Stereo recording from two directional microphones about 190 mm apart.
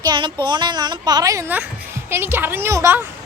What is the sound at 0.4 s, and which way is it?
A woman's voice, 25° right (ahead or behind).